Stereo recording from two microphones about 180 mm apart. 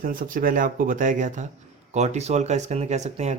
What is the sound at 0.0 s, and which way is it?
Speech, 50° right (ahead or behind).